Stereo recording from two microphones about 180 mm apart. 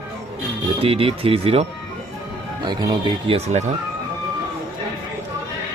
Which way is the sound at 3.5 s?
40° right (ahead or behind).